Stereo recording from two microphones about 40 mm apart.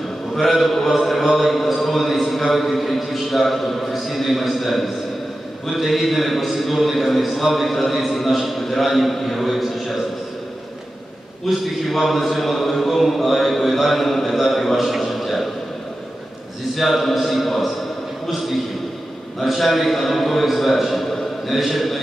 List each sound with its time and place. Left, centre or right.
0.4 s a man's voice: centre
11.4 s a man's voice: centre
16.7 s a man's voice: centre
18.2 s a sound: centre
19.4 s a man's voice: centre